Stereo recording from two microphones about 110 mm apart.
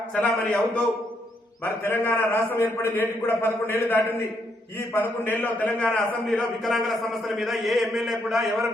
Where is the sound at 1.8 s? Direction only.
20° left (ahead or behind).